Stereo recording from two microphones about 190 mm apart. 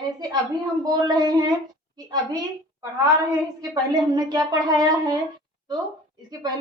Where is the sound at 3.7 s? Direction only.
20° right (ahead or behind).